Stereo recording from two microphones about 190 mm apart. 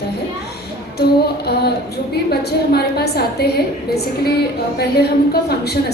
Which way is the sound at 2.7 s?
55° left (ahead or behind).